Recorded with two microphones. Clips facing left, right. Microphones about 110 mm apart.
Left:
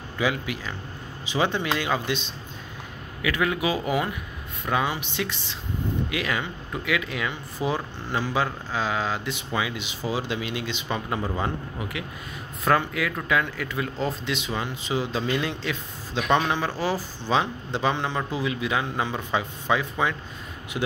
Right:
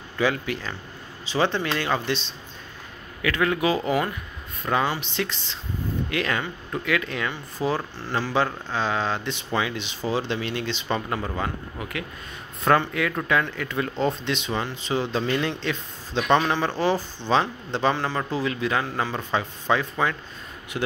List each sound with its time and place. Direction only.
0.2 s speech: 10° left (ahead or behind)
12.6 s speech: 5° left (ahead or behind)